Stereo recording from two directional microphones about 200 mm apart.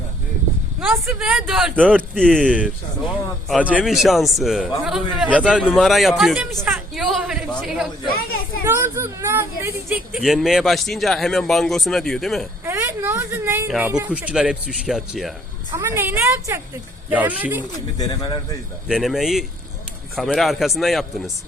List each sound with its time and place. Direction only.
0.8 s a man's voice: 5° right (ahead or behind)
8.6 s speech: 10° right (ahead or behind)
12.6 s a sound: 10° right (ahead or behind)
13.7 s speech: 5° right (ahead or behind)
15.7 s a woman's voice: 10° right (ahead or behind)
17.6 s speech: 20° left (ahead or behind)
18.9 s speech: centre (ahead or behind)